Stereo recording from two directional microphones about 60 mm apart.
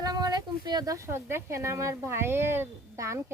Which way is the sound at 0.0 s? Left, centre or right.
Right.